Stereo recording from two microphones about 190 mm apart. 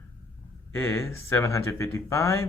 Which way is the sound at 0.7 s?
10° left (ahead or behind).